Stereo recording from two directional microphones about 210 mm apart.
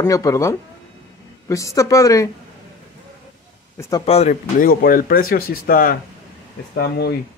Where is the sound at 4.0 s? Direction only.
30° left (ahead or behind); by 7.2 s 50° left (ahead or behind).